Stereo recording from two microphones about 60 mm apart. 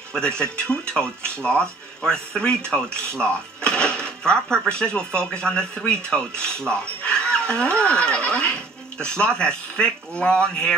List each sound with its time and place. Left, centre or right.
0.4 s speech: centre